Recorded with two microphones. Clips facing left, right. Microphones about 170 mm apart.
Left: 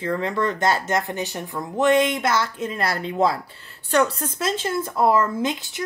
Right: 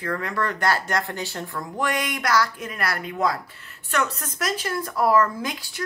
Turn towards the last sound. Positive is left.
turn(degrees=20)  # may be behind; listen again after turning